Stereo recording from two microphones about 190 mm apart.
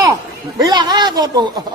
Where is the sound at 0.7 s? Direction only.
20° right (ahead or behind).